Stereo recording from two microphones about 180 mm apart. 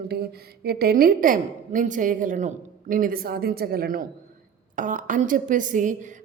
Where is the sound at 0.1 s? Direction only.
60° right (ahead or behind).